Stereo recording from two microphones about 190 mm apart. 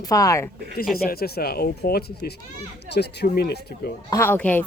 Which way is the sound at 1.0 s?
55° left (ahead or behind).